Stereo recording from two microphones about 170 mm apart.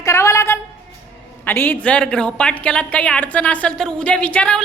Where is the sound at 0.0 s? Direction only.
15° left (ahead or behind).